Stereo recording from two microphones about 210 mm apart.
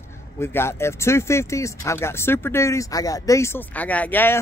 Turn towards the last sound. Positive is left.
turn(degrees=10)  # may be behind; listen again after turning